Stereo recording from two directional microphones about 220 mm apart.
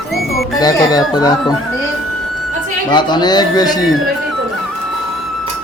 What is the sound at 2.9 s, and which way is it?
Speech, 20° left (ahead or behind).